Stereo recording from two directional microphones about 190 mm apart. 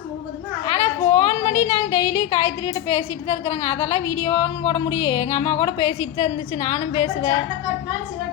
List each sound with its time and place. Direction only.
0.6 s a woman's voice: 25° left (ahead or behind)